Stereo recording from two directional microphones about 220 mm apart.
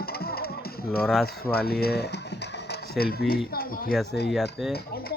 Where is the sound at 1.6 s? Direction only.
45° left (ahead or behind).